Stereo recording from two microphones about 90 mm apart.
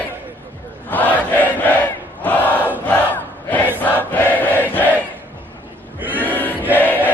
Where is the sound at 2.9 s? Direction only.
20° left (ahead or behind).